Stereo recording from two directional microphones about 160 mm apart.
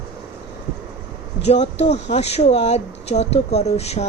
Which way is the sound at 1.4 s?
40° left (ahead or behind).